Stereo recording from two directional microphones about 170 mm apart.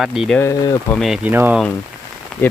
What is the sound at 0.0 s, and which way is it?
Speech, centre (ahead or behind).